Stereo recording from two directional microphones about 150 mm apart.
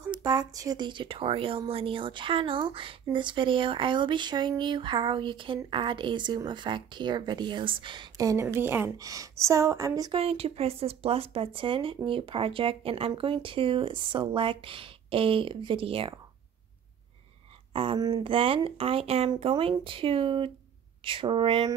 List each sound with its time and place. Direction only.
0.1 s speech: 25° right (ahead or behind)
10.1 s speech: 40° right (ahead or behind)
17.9 s speech: 30° right (ahead or behind)